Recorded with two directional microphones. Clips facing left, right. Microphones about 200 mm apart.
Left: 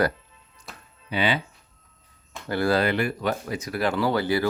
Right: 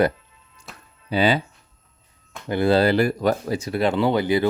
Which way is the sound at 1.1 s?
35° right (ahead or behind).